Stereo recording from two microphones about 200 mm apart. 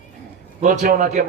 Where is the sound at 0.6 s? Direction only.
40° right (ahead or behind).